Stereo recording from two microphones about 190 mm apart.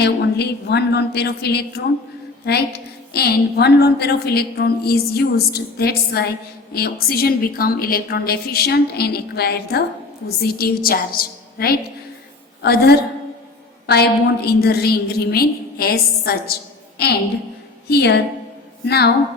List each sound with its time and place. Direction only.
0.0 s a woman's voice: 60° left (ahead or behind)
17.8 s a woman's voice: 60° left (ahead or behind)